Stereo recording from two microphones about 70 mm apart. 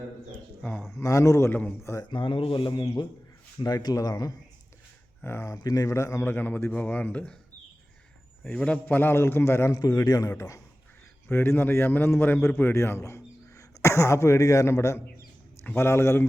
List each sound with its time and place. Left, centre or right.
1.0 s speech: left
1.5 s speech: left
2.6 s a man's voice: left
3.8 s a man's voice: left
5.2 s speech: left
5.5 s speech: left
6.2 s speech: left
8.4 s a man's voice: centre
8.9 s a man's voice: left
9.7 s a man's voice: left
10.3 s a man's voice: left